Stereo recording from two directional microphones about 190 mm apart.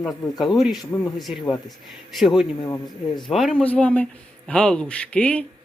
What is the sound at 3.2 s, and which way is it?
Speech, centre (ahead or behind).